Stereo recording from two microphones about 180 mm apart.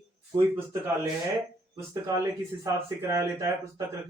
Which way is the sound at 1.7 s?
15° right (ahead or behind).